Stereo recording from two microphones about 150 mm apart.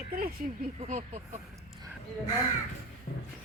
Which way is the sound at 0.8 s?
55° right (ahead or behind).